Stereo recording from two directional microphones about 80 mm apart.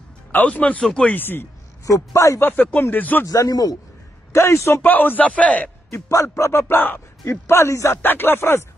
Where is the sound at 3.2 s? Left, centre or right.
Left.